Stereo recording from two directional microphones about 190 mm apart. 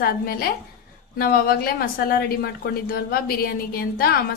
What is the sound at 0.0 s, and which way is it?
A woman's voice, 50° left (ahead or behind).